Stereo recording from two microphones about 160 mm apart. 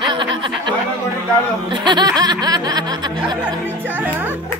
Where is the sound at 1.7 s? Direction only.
25° right (ahead or behind).